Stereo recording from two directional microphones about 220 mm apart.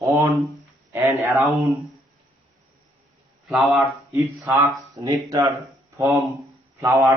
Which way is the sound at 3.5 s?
Centre (ahead or behind).